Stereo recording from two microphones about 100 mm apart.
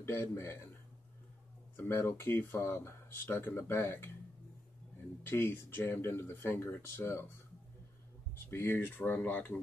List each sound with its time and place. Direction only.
0.0 s speech: 25° left (ahead or behind)
1.8 s speech: 25° left (ahead or behind)
5.2 s speech: 25° left (ahead or behind)
8.5 s speech: 25° left (ahead or behind)